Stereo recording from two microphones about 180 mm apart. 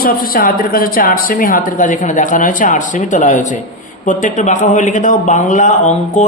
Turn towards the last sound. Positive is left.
turn(degrees=40)  # may be behind; listen again after turning